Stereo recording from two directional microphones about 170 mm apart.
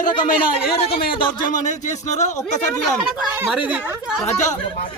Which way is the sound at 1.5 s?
45° left (ahead or behind).